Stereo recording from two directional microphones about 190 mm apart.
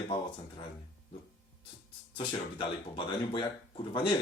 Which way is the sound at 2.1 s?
25° left (ahead or behind).